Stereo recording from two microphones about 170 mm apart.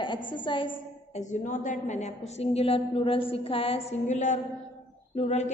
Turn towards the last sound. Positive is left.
turn(degrees=40)  # may be behind; listen again after turning